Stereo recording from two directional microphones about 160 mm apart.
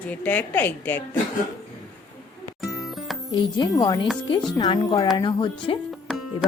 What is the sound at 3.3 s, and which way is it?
Speech, 25° left (ahead or behind).